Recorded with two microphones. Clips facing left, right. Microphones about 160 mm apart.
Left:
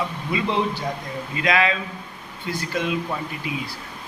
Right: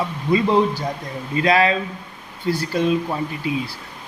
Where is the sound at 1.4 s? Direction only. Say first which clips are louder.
Right 5 dB; 35° right (ahead or behind).